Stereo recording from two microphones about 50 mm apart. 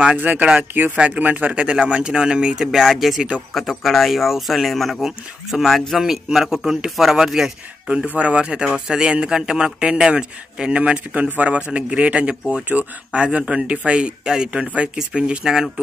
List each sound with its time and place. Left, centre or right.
0.2 s speech: right
0.9 s a man's voice: right; by 7.9 s centre
8.2 s a man's voice: right
14.2 s a man's voice: centre
14.5 s speech: right